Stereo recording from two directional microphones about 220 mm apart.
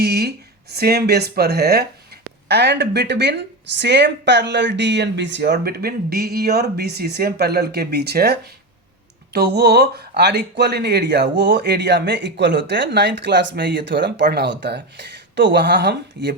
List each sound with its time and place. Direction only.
0.0 s speech: 45° right (ahead or behind)